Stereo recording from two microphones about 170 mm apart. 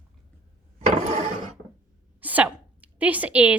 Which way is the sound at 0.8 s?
35° right (ahead or behind).